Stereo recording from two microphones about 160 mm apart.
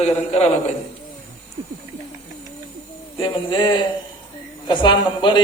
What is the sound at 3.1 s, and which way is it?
A man's voice, 30° left (ahead or behind).